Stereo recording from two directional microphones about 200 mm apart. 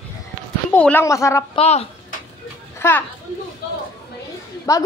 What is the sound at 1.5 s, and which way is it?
Speech, 30° left (ahead or behind).